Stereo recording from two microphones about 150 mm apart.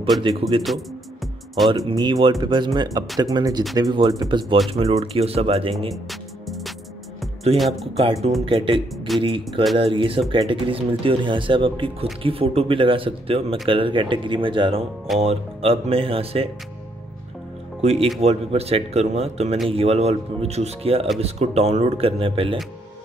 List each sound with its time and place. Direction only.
0.2 s speech: 30° right (ahead or behind)
1.7 s speech: 30° right (ahead or behind)
5.9 s music: centre (ahead or behind)
7.5 s speech: centre (ahead or behind)
8.0 s speech: 40° right (ahead or behind)
8.9 s a man's voice: centre (ahead or behind)
9.8 s speech: 35° right (ahead or behind)
17.8 s speech: 40° right (ahead or behind)